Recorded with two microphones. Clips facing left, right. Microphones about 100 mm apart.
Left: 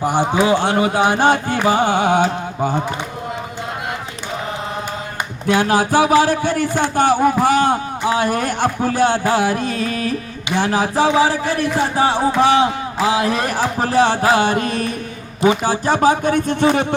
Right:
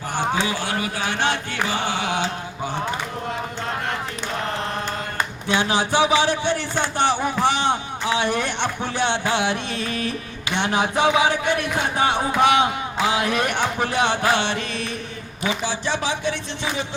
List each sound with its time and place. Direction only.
0.4 s speech: 25° left (ahead or behind)
1.0 s speech: 45° left (ahead or behind)
5.5 s speech: 45° left (ahead or behind)